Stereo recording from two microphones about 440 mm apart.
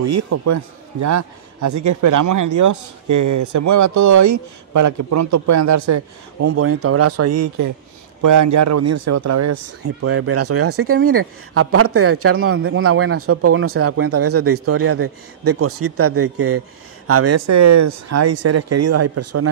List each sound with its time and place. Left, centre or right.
0.0 s speech: right